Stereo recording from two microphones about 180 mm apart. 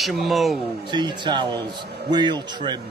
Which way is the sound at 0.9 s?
25° right (ahead or behind).